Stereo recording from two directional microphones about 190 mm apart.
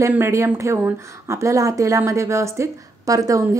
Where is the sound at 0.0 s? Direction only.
15° right (ahead or behind).